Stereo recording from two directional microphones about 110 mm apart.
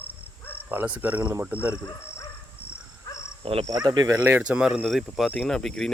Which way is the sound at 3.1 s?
25° left (ahead or behind).